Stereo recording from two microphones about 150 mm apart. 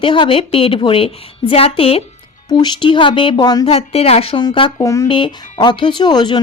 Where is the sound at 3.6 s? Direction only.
40° left (ahead or behind); by 5.1 s 20° left (ahead or behind).